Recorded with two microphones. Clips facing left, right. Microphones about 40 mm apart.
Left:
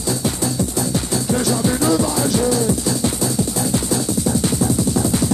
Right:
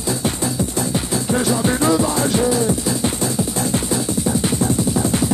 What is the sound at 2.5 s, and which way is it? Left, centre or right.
Music, right.